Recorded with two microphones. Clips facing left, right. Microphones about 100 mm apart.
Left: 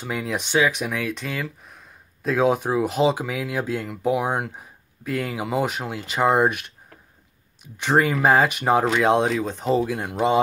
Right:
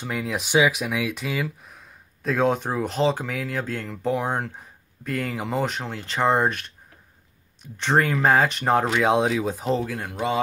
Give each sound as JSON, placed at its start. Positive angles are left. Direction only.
{"t": 0.0, "sound": "speech", "side_deg": 0}
{"t": 0.5, "sound": "speech", "side_deg": -10}
{"t": 7.6, "sound": "speech", "side_deg": 5}
{"t": 9.8, "sound": "speech", "side_deg": 15}